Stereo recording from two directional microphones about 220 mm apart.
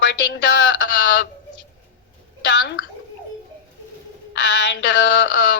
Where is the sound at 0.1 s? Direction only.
55° left (ahead or behind).